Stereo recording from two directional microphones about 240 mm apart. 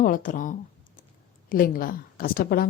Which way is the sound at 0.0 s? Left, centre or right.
Left.